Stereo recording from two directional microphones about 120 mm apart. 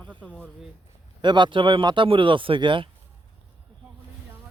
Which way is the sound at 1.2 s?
40° right (ahead or behind).